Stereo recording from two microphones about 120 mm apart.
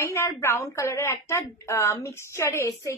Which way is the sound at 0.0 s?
25° left (ahead or behind).